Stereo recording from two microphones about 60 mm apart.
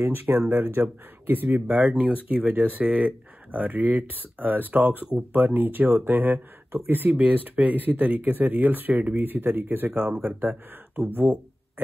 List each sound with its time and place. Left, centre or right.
0.0 s speech: right